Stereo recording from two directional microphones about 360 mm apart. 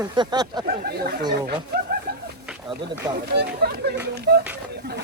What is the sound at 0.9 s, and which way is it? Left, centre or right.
Speech, right.